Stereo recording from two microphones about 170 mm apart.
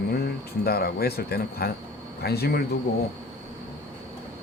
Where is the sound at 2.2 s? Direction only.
70° left (ahead or behind).